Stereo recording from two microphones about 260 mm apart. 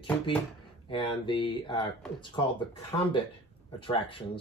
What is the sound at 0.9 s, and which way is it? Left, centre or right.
A man's voice, centre.